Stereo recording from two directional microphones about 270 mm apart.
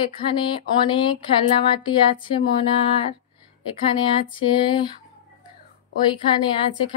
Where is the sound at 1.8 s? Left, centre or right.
Centre.